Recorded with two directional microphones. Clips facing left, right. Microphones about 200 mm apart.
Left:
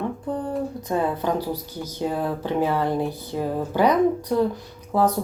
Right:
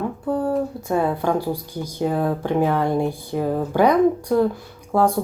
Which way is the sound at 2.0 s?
45° right (ahead or behind).